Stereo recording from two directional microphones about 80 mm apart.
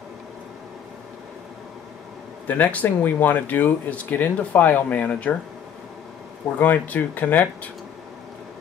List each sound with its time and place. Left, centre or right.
2.4 s speech: left
6.6 s speech: left